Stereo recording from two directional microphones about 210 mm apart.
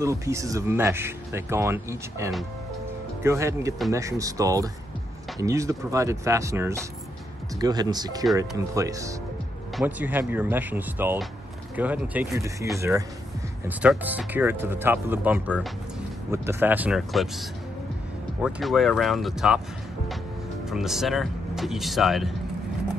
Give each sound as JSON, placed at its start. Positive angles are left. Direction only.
{"t": 0.0, "sound": "speech", "side_deg": -15}
{"t": 20.6, "sound": "speech", "side_deg": 0}